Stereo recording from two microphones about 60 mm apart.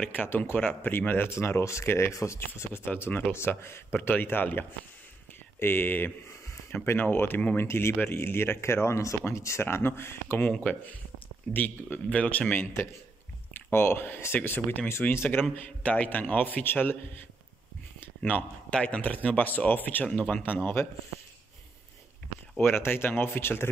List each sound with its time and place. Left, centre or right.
0.1 s speech: left
2.7 s speech: left
3.3 s speech: left
15.5 s speech: left
18.0 s a sound: left
18.7 s speech: centre
22.6 s speech: left